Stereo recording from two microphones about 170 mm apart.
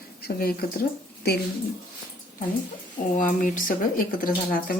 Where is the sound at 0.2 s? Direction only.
65° left (ahead or behind).